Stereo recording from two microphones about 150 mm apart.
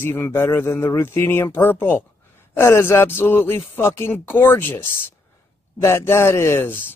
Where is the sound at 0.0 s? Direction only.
15° left (ahead or behind).